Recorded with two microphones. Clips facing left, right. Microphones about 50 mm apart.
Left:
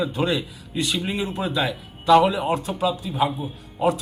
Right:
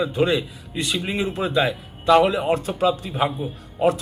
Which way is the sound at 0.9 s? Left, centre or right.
Centre.